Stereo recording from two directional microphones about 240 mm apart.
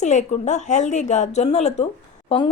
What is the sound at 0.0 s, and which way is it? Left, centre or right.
Speech, left.